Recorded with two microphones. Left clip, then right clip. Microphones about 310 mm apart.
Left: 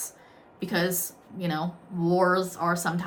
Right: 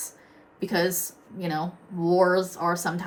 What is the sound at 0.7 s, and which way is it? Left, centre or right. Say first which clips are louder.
Speech: right 2 dB; centre.